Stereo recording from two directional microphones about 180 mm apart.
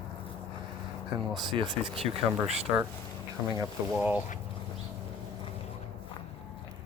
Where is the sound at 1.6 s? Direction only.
25° right (ahead or behind).